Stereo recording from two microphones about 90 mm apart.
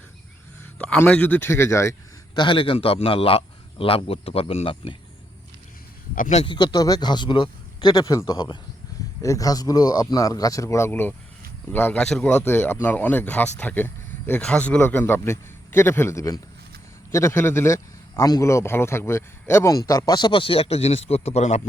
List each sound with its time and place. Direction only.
0.8 s speech: 15° left (ahead or behind); by 2.0 s 30° left (ahead or behind)
2.3 s a man's voice: 65° left (ahead or behind)
6.4 s speech: 60° left (ahead or behind)
9.2 s speech: 40° left (ahead or behind); by 11.9 s 20° left (ahead or behind)
11.9 s speech: 10° left (ahead or behind)
12.4 s speech: 25° left (ahead or behind)
14.8 s speech: 25° left (ahead or behind)
18.2 s speech: 40° left (ahead or behind)
20.1 s speech: 60° left (ahead or behind); by 21.0 s 90° left